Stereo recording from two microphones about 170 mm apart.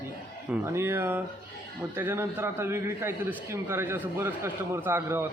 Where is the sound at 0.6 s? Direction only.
15° right (ahead or behind).